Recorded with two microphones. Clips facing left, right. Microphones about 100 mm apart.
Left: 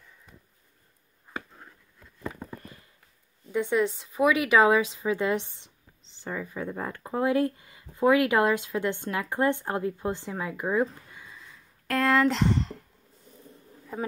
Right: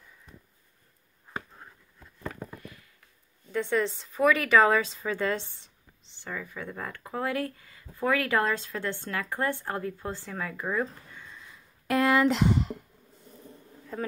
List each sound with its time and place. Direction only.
2.6 s a sound: 30° left (ahead or behind)
3.5 s speech: 15° left (ahead or behind)
11.2 s sniff: centre (ahead or behind)
11.9 s speech: 10° right (ahead or behind)
13.9 s speech: 15° left (ahead or behind)